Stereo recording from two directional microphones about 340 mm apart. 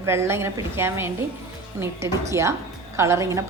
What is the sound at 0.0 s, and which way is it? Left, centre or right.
A woman's voice, centre.